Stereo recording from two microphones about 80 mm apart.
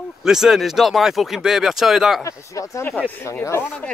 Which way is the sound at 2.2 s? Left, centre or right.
Left.